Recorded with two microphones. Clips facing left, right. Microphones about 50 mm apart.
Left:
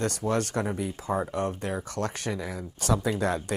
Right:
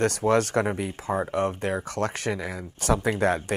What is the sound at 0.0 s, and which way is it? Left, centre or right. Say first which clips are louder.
Speech: right 6 dB; right.